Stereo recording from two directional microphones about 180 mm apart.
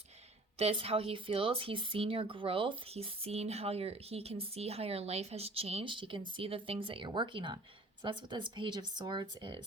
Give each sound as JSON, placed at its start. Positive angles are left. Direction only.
{"t": 0.6, "sound": "speech", "side_deg": -35}